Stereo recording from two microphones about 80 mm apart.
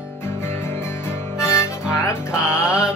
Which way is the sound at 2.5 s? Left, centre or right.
Centre.